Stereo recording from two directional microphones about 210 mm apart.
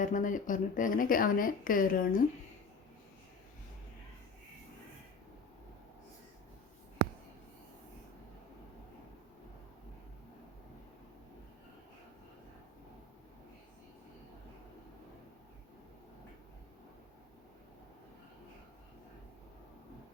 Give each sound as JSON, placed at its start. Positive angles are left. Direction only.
{"t": 0.0, "sound": "speech", "side_deg": 40}